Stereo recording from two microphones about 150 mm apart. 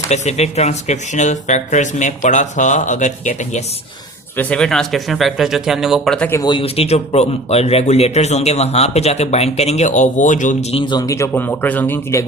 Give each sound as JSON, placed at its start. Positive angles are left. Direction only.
{"t": 0.1, "sound": "speech", "side_deg": 45}
{"t": 4.4, "sound": "speech", "side_deg": 5}
{"t": 6.3, "sound": "speech", "side_deg": 30}